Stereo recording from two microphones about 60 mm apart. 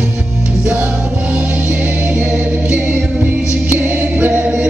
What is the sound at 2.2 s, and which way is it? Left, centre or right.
Music, right.